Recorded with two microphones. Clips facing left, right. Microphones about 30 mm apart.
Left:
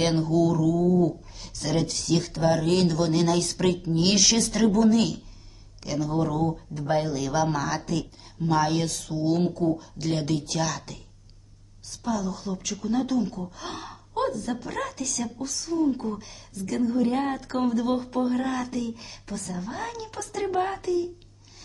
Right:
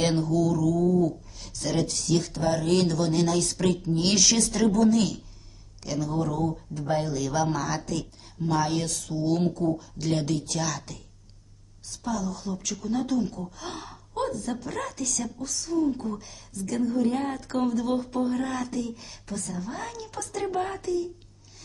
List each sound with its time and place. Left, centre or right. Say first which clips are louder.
0.0 s a woman's voice: left 2 dB; centre